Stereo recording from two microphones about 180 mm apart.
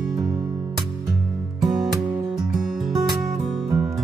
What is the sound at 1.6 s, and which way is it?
Music, centre (ahead or behind).